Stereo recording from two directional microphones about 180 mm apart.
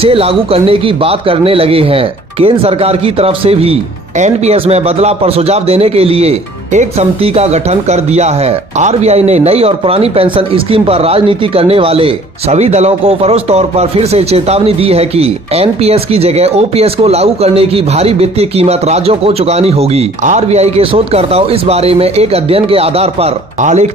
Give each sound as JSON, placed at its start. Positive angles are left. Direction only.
{"t": 0.0, "sound": "speech", "side_deg": -30}